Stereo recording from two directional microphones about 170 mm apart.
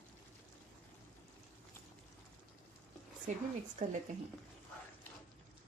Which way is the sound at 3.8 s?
45° right (ahead or behind).